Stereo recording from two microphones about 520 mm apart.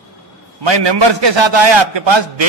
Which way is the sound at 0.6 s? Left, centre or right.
Right.